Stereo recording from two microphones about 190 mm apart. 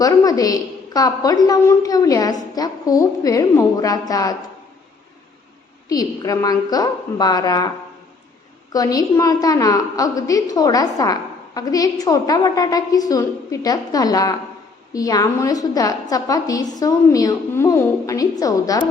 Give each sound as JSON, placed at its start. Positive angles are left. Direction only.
{"t": 0.0, "sound": "a woman's voice", "side_deg": 20}
{"t": 5.9, "sound": "a woman's voice", "side_deg": 20}
{"t": 8.7, "sound": "a woman's voice", "side_deg": 20}